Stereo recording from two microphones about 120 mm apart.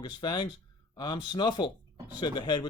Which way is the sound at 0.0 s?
40° left (ahead or behind).